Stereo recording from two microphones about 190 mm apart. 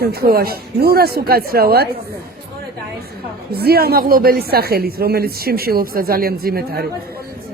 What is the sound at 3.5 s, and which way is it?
A woman's voice, 55° right (ahead or behind).